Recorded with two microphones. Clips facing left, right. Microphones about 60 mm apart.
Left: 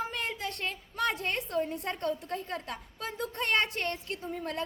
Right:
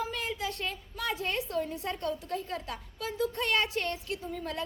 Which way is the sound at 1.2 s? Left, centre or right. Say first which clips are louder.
Even; left.